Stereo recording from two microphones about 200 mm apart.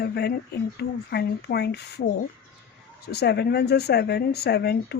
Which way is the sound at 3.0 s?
55° left (ahead or behind).